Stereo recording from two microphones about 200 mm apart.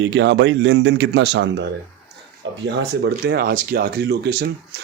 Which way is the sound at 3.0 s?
55° right (ahead or behind).